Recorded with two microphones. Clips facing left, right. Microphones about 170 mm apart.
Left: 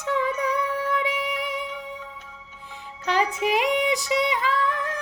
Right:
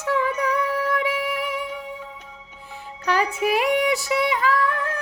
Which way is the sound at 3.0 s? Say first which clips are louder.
Right 1 dB; 20° left (ahead or behind).